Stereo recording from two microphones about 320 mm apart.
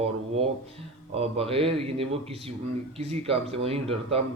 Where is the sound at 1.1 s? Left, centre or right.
Centre.